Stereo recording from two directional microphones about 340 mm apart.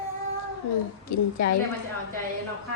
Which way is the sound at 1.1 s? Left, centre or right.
Left.